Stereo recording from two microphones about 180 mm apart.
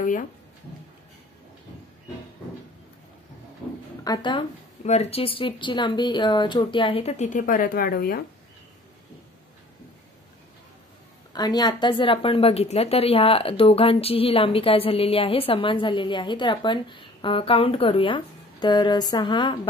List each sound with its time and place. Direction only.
4.0 s speech: 25° left (ahead or behind)
4.8 s speech: 40° left (ahead or behind); by 8.2 s 55° left (ahead or behind)
11.3 s speech: 20° left (ahead or behind)